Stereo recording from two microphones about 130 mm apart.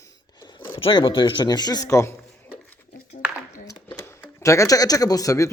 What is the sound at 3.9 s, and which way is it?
Speech, 20° left (ahead or behind).